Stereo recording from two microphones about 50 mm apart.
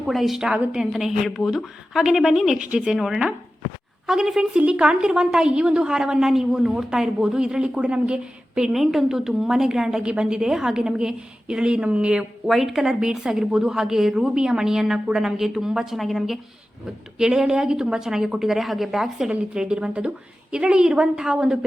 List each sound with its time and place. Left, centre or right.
0.1 s a woman's voice: centre
8.7 s a woman's voice: centre; by 12.2 s right
12.5 s a woman's voice: centre
16.0 s a woman's voice: centre
17.2 s a woman's voice: centre
19.3 s a woman's voice: centre